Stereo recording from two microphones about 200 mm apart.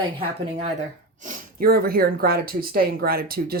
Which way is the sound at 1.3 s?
45° right (ahead or behind).